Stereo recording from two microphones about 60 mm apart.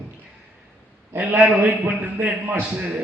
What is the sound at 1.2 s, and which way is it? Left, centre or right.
A man's voice, right.